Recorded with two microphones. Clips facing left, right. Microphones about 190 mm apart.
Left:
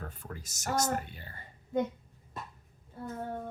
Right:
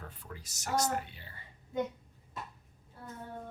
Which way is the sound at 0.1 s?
45° left (ahead or behind).